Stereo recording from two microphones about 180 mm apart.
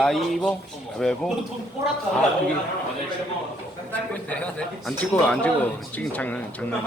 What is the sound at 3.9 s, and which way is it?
Speech, 5° left (ahead or behind).